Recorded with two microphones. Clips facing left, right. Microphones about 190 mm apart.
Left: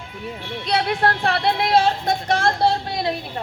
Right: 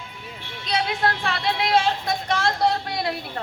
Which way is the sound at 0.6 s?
60° left (ahead or behind).